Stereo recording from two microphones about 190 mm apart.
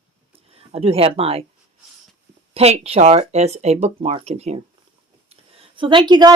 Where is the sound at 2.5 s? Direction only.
30° right (ahead or behind).